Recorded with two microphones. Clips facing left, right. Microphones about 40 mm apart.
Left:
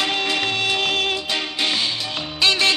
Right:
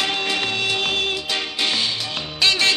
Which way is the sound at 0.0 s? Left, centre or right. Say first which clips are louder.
Left 1 dB; left.